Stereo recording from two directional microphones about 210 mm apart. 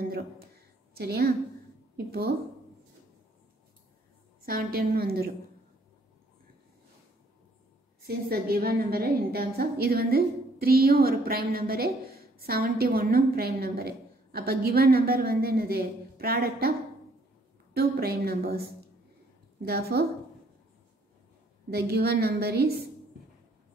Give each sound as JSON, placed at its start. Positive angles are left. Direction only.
{"t": 0.9, "sound": "a woman's voice", "side_deg": -50}
{"t": 4.5, "sound": "a woman's voice", "side_deg": -45}
{"t": 8.1, "sound": "a woman's voice", "side_deg": -45}
{"t": 17.7, "sound": "a woman's voice", "side_deg": -45}
{"t": 19.6, "sound": "a woman's voice", "side_deg": -50}
{"t": 21.6, "sound": "a woman's voice", "side_deg": -50}